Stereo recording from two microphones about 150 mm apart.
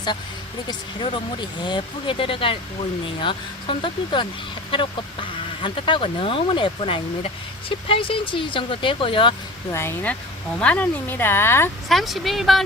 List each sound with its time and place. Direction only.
0.7 s speech: 30° left (ahead or behind)
5.6 s speech: 35° left (ahead or behind)
9.7 s speech: 15° left (ahead or behind)
11.9 s speech: centre (ahead or behind)